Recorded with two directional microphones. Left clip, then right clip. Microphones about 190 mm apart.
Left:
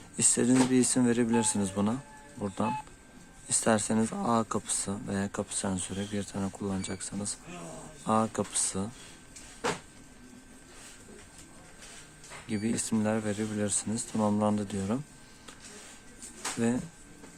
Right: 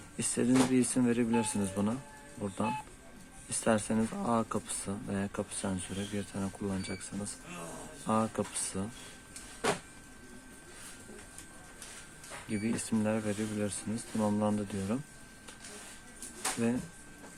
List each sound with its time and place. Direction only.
0.2 s speech: 20° left (ahead or behind)
12.5 s speech: 15° left (ahead or behind)
16.6 s speech: 20° left (ahead or behind)